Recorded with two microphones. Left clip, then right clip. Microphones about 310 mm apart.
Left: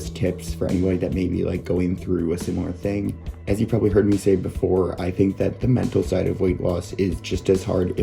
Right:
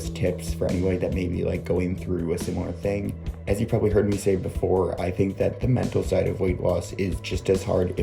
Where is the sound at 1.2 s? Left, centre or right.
Centre.